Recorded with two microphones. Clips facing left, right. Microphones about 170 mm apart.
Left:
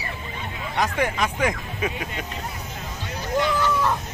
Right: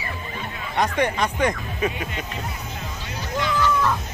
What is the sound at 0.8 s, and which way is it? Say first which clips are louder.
Speech: right 2 dB; centre (ahead or behind).